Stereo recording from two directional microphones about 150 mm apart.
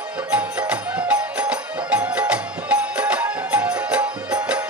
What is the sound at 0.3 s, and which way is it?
Music, 10° right (ahead or behind).